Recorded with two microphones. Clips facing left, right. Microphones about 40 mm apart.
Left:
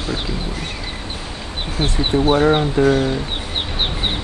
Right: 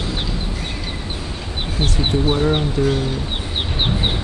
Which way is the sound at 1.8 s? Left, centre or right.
Left.